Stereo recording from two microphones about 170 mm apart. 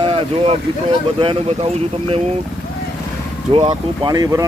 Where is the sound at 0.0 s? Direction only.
35° right (ahead or behind).